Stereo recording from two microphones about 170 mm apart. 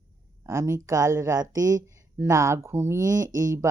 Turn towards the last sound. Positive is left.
turn(degrees=-20)  # may be behind; listen again after turning